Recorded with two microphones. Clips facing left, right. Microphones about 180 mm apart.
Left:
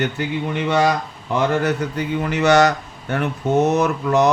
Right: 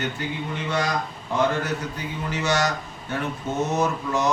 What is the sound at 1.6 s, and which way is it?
Speech, 65° left (ahead or behind).